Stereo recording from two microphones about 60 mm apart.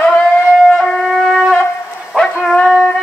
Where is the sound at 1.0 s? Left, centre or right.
Centre.